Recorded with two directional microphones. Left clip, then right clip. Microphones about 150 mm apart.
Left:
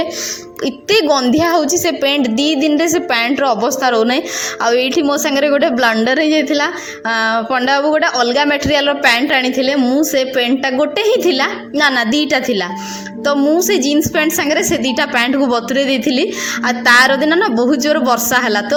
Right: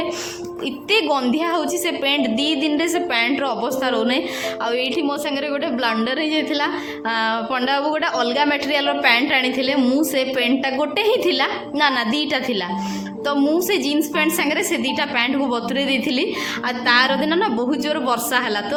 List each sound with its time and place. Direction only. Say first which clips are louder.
0.9 s a woman's voice: left 6 dB; 40° left (ahead or behind)
9.8 s a woman's voice: left 5 dB; 15° left (ahead or behind)
10.2 s a woman's voice: left 5 dB; 30° left (ahead or behind)
13.2 s a woman's voice: left 6 dB; 20° left (ahead or behind)
16.6 s a woman's voice: left 7 dB; 45° left (ahead or behind)